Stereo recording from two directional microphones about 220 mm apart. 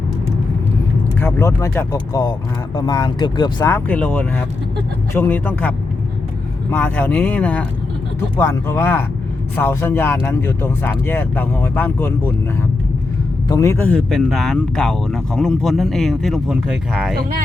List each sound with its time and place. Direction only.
1.2 s speech: 10° left (ahead or behind)
13.5 s speech: 15° left (ahead or behind)